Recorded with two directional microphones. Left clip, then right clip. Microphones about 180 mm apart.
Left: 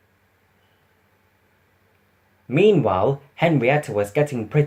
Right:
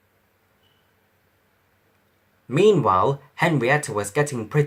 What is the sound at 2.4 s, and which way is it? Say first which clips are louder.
Speech: even; 30° right (ahead or behind).